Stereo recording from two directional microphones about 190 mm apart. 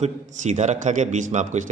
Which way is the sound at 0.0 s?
35° right (ahead or behind).